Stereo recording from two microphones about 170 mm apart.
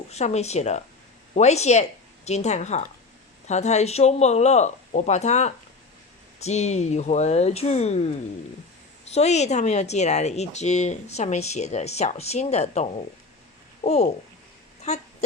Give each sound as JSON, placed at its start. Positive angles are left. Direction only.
{"t": 0.1, "sound": "speech", "side_deg": 40}
{"t": 9.0, "sound": "a woman's voice", "side_deg": 40}